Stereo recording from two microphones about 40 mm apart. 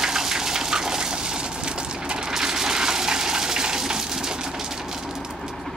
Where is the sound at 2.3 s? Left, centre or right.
Centre.